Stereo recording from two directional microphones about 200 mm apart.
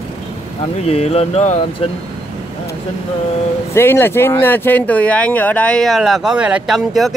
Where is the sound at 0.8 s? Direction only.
30° left (ahead or behind).